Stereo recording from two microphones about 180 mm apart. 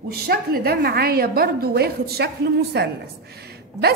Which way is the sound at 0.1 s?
60° right (ahead or behind).